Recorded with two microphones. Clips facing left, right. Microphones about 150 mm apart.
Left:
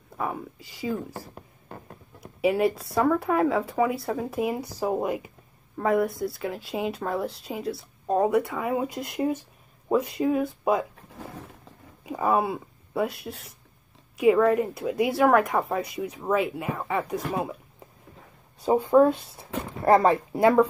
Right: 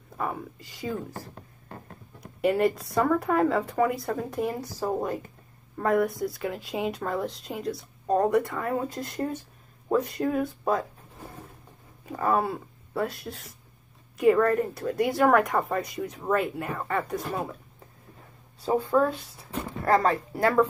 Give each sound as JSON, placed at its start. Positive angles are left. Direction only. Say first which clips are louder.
{"t": 0.2, "sound": "speech", "louder": "left 1 dB", "side_deg": 0}
{"t": 2.1, "sound": "speech", "louder": "left 1 dB", "side_deg": 5}
{"t": 12.1, "sound": "speech", "louder": "left 2 dB", "side_deg": 10}
{"t": 18.7, "sound": "speech", "louder": "left 5 dB", "side_deg": 15}